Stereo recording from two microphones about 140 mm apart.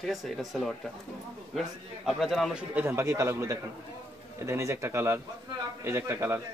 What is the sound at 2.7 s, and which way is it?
A man's voice, 15° right (ahead or behind).